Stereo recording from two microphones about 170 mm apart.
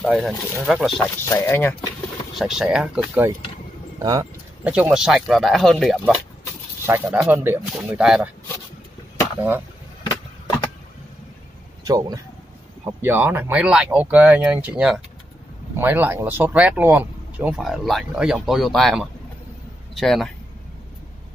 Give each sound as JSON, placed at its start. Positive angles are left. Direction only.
{"t": 0.0, "sound": "speech", "side_deg": 0}
{"t": 1.3, "sound": "speech", "side_deg": 15}
{"t": 2.3, "sound": "speech", "side_deg": 0}
{"t": 4.0, "sound": "speech", "side_deg": -20}
{"t": 4.6, "sound": "speech", "side_deg": -10}
{"t": 6.9, "sound": "speech", "side_deg": -10}
{"t": 7.6, "sound": "speech", "side_deg": -5}
{"t": 9.4, "sound": "speech", "side_deg": -10}
{"t": 11.8, "sound": "speech", "side_deg": -20}